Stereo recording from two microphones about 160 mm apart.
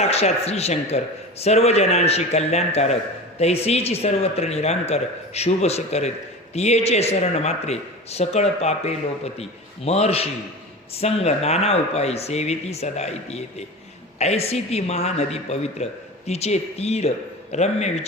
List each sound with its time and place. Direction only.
0.0 s a man's voice: 40° left (ahead or behind)